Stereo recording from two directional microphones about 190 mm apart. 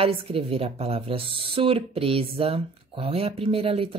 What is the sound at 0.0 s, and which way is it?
A woman's voice, 30° right (ahead or behind).